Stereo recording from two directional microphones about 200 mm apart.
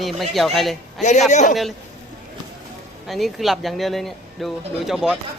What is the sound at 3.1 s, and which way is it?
Speech, centre (ahead or behind).